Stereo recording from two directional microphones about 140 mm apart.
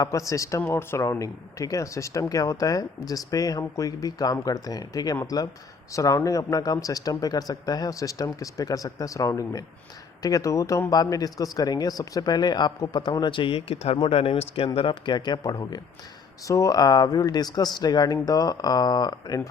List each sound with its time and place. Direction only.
0.0 s speech: 20° left (ahead or behind)